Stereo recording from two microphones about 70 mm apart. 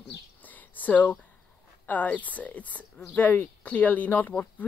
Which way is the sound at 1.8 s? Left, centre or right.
Left.